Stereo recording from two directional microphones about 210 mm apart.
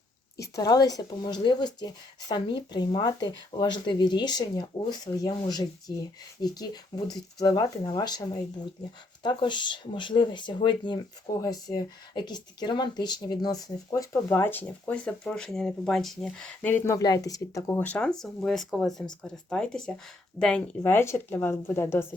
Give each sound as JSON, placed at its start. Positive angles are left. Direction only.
{"t": 0.5, "sound": "speech", "side_deg": 20}